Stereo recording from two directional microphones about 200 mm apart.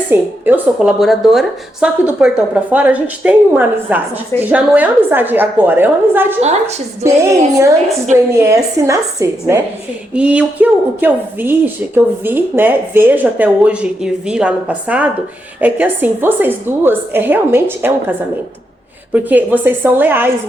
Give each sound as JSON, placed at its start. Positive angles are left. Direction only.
{"t": 0.1, "sound": "a woman's voice", "side_deg": -10}
{"t": 6.4, "sound": "a woman's voice", "side_deg": -35}
{"t": 7.0, "sound": "a woman's voice", "side_deg": -15}
{"t": 19.1, "sound": "a woman's voice", "side_deg": -10}